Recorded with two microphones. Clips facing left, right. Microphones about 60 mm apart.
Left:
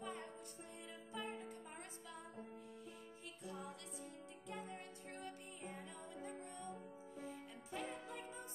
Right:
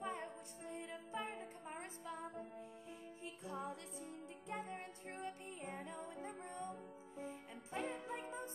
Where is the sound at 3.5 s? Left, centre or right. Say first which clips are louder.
Right 4 dB; right.